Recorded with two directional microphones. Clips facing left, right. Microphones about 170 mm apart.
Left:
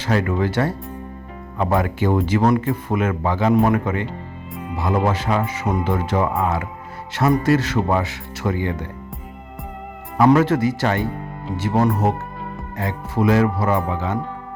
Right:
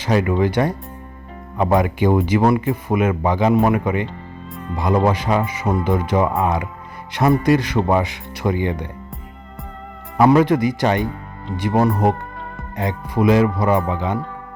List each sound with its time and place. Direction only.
0.0 s speech: 15° right (ahead or behind)
7.1 s music: 15° right (ahead or behind)
7.4 s speech: 15° right (ahead or behind)
10.2 s speech: 15° right (ahead or behind)